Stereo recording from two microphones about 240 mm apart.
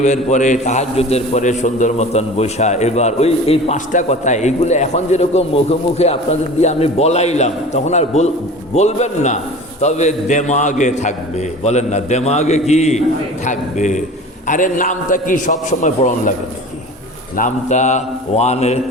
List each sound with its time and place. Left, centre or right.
0.0 s a man's voice: left
17.3 s a man's voice: left